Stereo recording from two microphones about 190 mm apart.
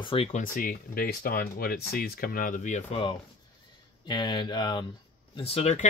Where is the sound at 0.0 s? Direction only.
30° left (ahead or behind).